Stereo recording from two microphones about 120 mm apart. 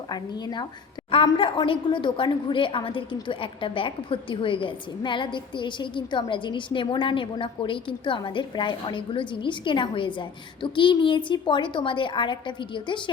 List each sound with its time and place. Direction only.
0.1 s a woman's voice: 35° left (ahead or behind)
1.1 s a woman's voice: 45° left (ahead or behind)